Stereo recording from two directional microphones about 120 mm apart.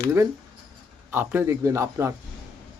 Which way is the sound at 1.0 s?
20° right (ahead or behind).